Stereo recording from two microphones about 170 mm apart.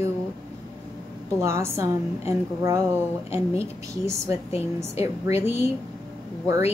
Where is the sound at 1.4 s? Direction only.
15° right (ahead or behind).